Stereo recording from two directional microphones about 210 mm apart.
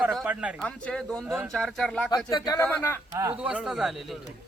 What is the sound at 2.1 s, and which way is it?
Speech, 20° left (ahead or behind).